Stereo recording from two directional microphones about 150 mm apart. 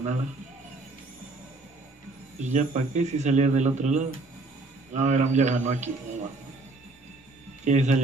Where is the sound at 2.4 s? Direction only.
50° right (ahead or behind).